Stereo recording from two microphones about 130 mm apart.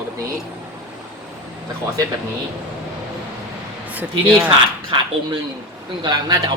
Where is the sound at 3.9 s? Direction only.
10° right (ahead or behind).